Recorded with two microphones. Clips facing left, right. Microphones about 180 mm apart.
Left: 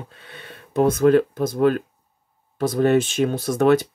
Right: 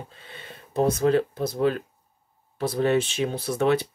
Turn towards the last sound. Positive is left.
turn(degrees=45)  # may be behind; listen again after turning